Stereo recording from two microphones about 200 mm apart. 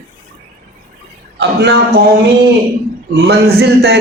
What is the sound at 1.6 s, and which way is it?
Speech, 60° right (ahead or behind).